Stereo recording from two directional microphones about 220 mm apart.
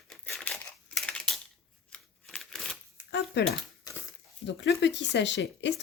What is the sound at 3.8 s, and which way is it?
Dog, 10° left (ahead or behind).